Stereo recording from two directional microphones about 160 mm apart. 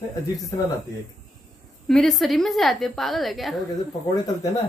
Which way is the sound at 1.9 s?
Centre (ahead or behind).